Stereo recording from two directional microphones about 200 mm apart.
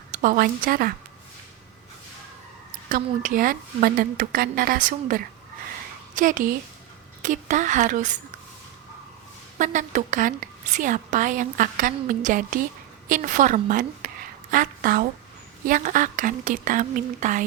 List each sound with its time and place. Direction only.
0.1 s a woman's voice: 45° right (ahead or behind)
2.9 s a woman's voice: 45° right (ahead or behind)
9.6 s a woman's voice: 40° right (ahead or behind)